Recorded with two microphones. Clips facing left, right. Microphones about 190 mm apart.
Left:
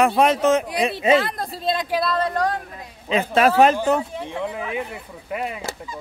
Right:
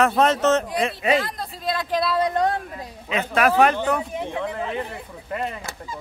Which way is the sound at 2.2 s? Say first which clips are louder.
Right 1 dB; 20° right (ahead or behind).